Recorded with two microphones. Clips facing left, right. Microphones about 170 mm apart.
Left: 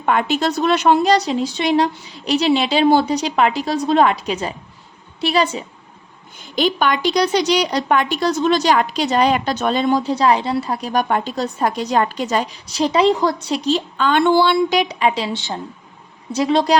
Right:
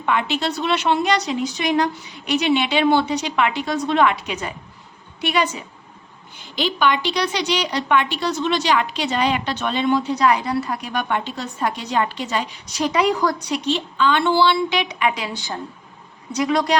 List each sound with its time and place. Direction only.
0.0 s a woman's voice: 45° left (ahead or behind)
6.6 s a woman's voice: 45° left (ahead or behind); by 16.7 s 30° left (ahead or behind)